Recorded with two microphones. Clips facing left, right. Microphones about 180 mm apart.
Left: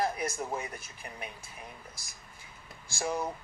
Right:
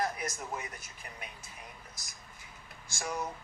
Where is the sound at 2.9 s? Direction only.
30° left (ahead or behind).